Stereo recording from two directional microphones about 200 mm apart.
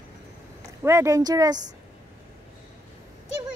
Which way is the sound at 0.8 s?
15° right (ahead or behind).